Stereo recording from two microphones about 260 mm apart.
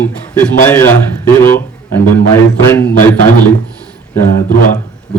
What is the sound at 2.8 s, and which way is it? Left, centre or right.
Speech, left.